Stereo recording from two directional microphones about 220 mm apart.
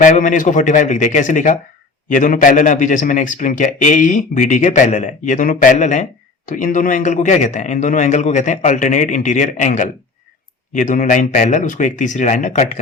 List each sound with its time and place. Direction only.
0.0 s a man's voice: 35° left (ahead or behind)